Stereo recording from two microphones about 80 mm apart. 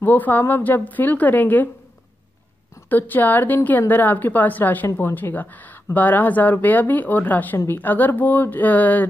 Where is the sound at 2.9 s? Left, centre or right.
Left.